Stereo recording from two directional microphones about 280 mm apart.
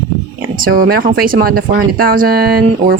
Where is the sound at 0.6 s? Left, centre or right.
Right.